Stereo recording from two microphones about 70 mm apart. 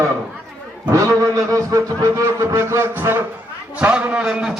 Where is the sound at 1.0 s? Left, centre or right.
Right.